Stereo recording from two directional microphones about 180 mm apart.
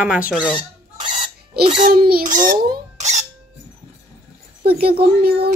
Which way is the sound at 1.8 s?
50° right (ahead or behind).